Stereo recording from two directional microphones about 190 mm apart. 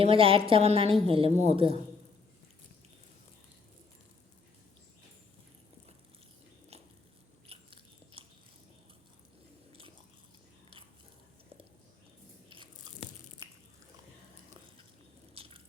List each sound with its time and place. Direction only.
0.0 s a woman's voice: 30° right (ahead or behind)
7.4 s biting: 30° right (ahead or behind)
12.5 s biting: 25° right (ahead or behind)
15.4 s a sound: 30° right (ahead or behind)